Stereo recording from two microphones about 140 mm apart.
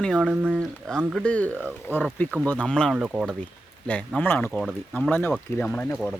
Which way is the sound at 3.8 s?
10° left (ahead or behind).